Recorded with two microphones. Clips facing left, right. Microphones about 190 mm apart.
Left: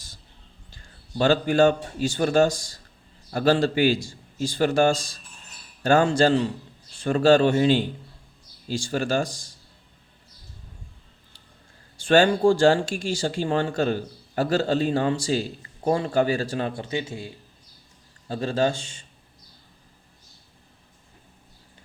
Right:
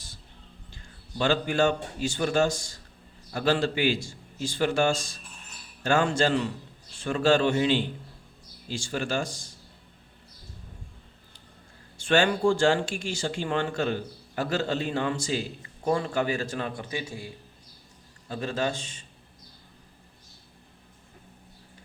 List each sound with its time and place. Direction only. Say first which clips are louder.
1.2 s speech: left 5 dB; 40° left (ahead or behind)
11.9 s speech: left 5 dB; 35° left (ahead or behind)